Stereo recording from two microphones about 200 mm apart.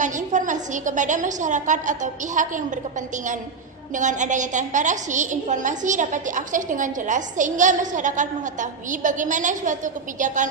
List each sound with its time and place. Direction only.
0.0 s a woman's voice: 40° right (ahead or behind)
3.9 s a woman's voice: 40° right (ahead or behind)